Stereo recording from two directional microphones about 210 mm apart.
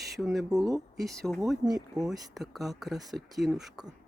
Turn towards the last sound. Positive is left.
turn(degrees=0)  # may be behind; listen again after turning